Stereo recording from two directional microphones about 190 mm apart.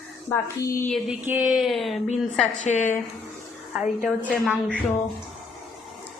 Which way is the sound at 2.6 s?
40° left (ahead or behind).